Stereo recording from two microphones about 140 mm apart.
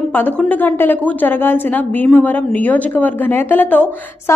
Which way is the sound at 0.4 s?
10° left (ahead or behind).